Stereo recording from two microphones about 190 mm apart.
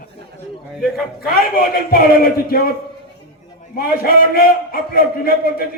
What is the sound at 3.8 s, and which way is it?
A man's voice, 50° left (ahead or behind).